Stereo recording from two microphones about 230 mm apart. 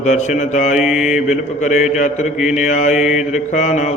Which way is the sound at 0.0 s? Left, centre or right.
Left.